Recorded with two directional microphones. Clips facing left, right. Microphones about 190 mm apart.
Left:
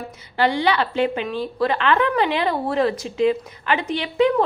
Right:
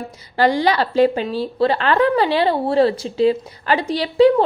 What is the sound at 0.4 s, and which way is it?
A woman's voice, 40° right (ahead or behind).